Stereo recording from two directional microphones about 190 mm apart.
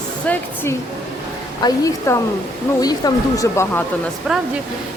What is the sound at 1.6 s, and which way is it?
Speech, 20° left (ahead or behind).